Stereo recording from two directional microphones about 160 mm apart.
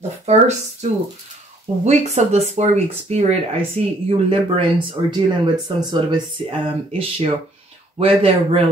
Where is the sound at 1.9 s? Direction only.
45° right (ahead or behind).